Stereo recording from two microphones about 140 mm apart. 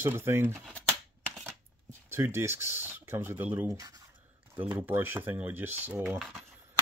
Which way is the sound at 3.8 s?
25° right (ahead or behind).